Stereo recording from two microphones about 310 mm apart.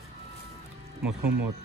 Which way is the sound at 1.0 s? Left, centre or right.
Right.